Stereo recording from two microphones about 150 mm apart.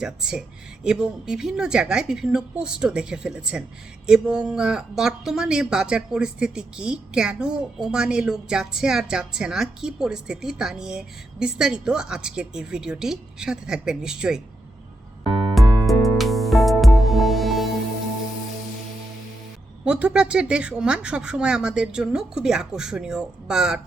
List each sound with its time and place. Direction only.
0.0 s speech: 5° right (ahead or behind)
15.5 s music: centre (ahead or behind)
19.8 s speech: 10° right (ahead or behind)